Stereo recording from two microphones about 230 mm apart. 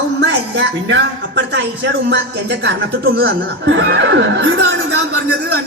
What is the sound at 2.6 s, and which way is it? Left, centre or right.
Speech, right.